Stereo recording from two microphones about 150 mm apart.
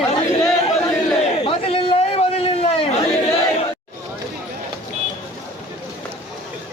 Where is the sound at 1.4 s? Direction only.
40° left (ahead or behind).